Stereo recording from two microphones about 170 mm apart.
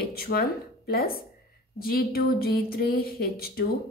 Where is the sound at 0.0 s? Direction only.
65° left (ahead or behind).